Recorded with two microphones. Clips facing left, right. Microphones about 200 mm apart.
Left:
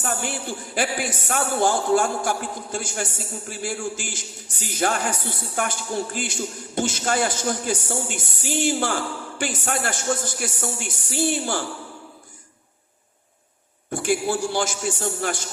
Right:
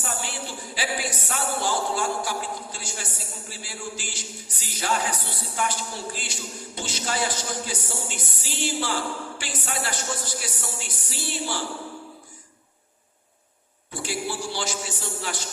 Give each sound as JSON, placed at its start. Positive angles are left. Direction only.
{"t": 0.0, "sound": "speech", "side_deg": 50}
{"t": 13.9, "sound": "speech", "side_deg": 50}